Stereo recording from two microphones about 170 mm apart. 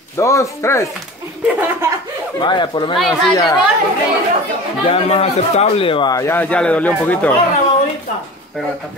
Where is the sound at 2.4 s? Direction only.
25° left (ahead or behind).